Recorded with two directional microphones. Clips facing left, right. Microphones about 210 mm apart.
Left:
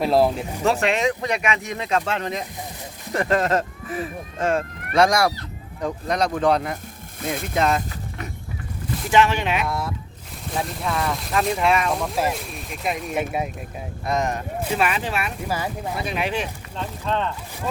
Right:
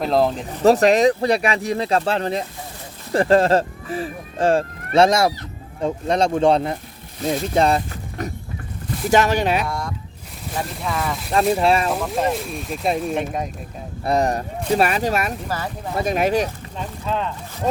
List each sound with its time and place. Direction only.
0.0 s speech: 5° left (ahead or behind)
0.6 s speech: 40° right (ahead or behind)
9.6 s speech: 5° left (ahead or behind)
11.5 s speech: 35° right (ahead or behind)
11.9 s speech: centre (ahead or behind)
14.0 s speech: 35° right (ahead or behind)
15.4 s speech: 10° left (ahead or behind)
16.0 s speech: 45° right (ahead or behind)
16.7 s speech: 5° right (ahead or behind)